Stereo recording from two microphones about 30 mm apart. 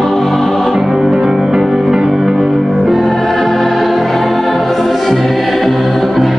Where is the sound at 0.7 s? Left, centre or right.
Centre.